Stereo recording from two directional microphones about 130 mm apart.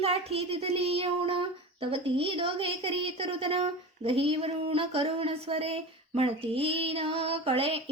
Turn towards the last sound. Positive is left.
turn(degrees=-45)  # may be behind; listen again after turning